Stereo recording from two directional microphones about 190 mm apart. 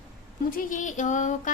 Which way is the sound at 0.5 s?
45° left (ahead or behind).